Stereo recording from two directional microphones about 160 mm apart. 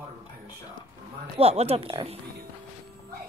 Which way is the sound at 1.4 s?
40° right (ahead or behind).